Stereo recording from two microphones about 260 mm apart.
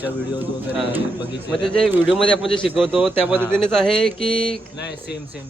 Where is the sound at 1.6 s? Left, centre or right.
Centre.